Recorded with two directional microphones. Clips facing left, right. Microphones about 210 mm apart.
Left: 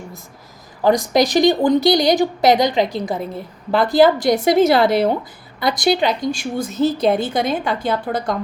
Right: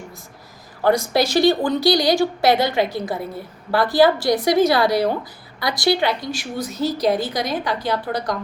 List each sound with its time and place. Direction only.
0.9 s a woman's voice: 15° left (ahead or behind)